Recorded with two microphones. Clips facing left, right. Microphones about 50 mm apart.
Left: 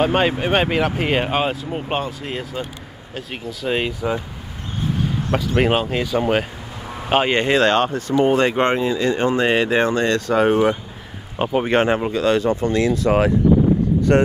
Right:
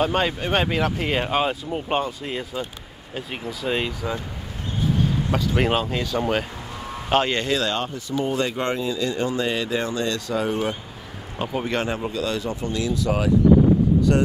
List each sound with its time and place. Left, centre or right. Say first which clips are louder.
0.0 s speech: left 4 dB; left
3.2 s speech: left 1 dB; centre
3.6 s speech: left 4 dB; left
5.3 s speech: left 5 dB; centre
7.6 s speech: left 9 dB; left